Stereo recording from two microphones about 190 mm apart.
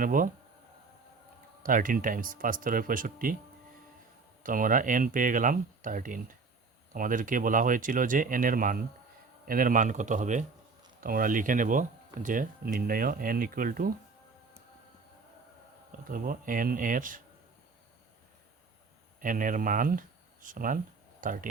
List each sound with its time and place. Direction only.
0.0 s speech: 45° right (ahead or behind)
1.6 s speech: 45° right (ahead or behind)
4.4 s speech: 45° right (ahead or behind)
16.0 s speech: 45° right (ahead or behind)
19.2 s speech: 45° right (ahead or behind)